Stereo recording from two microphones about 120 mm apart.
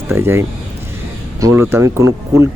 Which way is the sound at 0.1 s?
20° right (ahead or behind).